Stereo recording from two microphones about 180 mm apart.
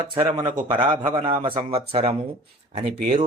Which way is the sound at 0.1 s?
25° right (ahead or behind).